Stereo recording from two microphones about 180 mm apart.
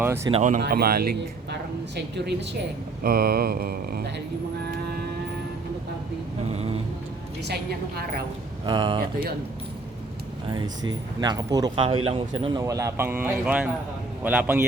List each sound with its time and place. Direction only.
0.3 s speech: 25° right (ahead or behind)
0.6 s mantra: 55° right (ahead or behind)
2.0 s speech: 70° right (ahead or behind)
3.0 s mantra: 55° right (ahead or behind)
6.5 s a sound: 35° right (ahead or behind)
7.4 s mantra: 60° right (ahead or behind)
8.6 s speech: 25° right (ahead or behind)
10.5 s a man's voice: 25° right (ahead or behind); by 14.6 s 10° right (ahead or behind)